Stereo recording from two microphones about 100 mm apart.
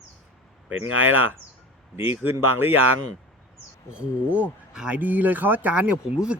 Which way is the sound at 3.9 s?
15° right (ahead or behind).